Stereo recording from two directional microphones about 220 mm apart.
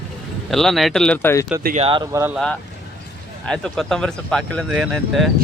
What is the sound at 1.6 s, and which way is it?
Speech, 35° right (ahead or behind).